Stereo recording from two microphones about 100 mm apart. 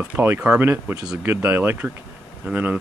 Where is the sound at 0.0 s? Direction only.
20° right (ahead or behind).